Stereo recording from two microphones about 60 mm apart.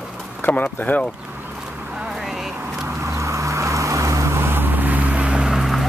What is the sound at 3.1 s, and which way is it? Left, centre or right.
Vehicle, right.